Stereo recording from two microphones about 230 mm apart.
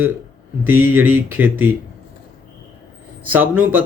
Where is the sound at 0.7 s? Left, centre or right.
Right.